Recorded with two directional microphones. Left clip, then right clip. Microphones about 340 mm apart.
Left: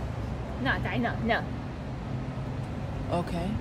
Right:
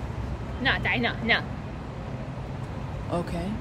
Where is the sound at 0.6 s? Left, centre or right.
Centre.